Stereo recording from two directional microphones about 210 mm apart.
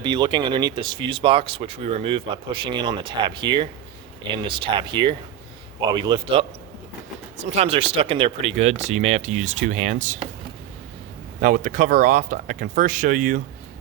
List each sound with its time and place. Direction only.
0.0 s speech: 20° right (ahead or behind)
7.5 s speech: 30° right (ahead or behind)
11.3 s speech: 45° right (ahead or behind)